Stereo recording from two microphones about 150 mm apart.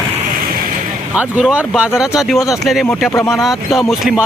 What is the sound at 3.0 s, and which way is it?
Speech, 15° left (ahead or behind).